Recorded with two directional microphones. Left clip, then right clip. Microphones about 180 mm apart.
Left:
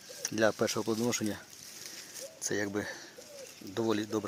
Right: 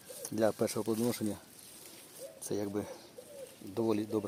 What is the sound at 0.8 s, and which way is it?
Speech, 25° left (ahead or behind).